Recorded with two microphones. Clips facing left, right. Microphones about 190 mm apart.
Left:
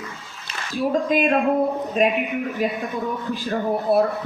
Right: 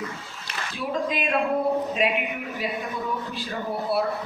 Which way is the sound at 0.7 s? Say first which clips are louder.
Left 7 dB; 45° left (ahead or behind).